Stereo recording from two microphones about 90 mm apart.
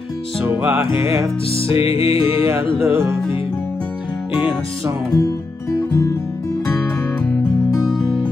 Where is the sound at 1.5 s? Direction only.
90° left.